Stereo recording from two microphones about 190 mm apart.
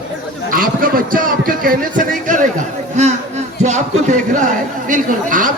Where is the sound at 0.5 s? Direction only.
50° right (ahead or behind).